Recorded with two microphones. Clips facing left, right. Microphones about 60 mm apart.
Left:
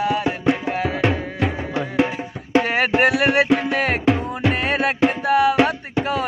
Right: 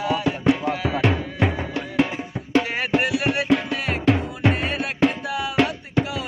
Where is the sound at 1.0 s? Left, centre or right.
Left.